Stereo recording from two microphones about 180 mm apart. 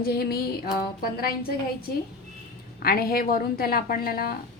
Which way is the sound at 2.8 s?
55° left (ahead or behind).